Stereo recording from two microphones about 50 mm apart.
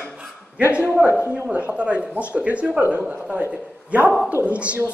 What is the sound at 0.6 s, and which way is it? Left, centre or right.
A man's voice, right.